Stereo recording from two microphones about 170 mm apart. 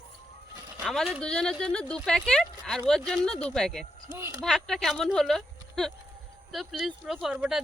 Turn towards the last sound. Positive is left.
turn(degrees=-5)  # may be behind; listen again after turning